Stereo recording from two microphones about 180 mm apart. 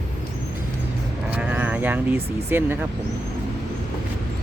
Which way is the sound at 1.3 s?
10° right (ahead or behind).